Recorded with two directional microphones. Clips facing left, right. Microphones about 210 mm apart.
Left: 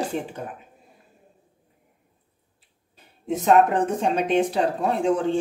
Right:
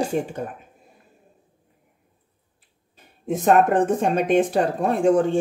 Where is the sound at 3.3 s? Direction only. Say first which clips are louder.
Right 1 dB; 50° right (ahead or behind).